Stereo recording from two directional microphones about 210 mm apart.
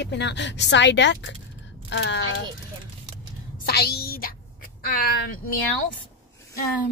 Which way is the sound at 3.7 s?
50° left (ahead or behind).